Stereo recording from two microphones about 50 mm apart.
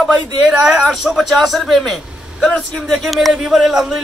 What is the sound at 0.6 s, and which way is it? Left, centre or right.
A man's voice, centre.